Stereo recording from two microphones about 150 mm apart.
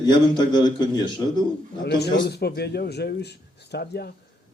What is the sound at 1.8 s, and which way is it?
A man's voice, 90° left.